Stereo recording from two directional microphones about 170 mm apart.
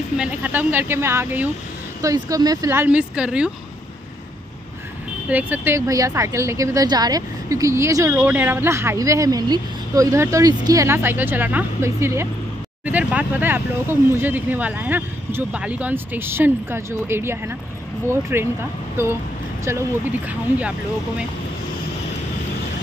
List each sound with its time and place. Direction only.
0.2 s a woman's voice: 10° right (ahead or behind)
5.3 s a woman's voice: 10° right (ahead or behind)
19.6 s a woman's voice: 15° right (ahead or behind)